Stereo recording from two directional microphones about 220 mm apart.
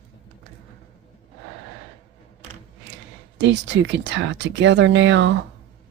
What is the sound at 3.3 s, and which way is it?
Speech, 55° right (ahead or behind).